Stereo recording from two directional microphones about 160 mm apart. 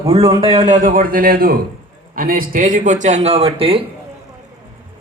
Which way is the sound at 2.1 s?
60° right (ahead or behind).